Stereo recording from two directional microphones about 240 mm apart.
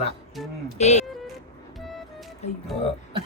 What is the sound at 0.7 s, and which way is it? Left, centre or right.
Speech, left.